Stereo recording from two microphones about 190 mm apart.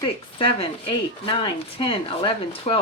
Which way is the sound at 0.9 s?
30° left (ahead or behind).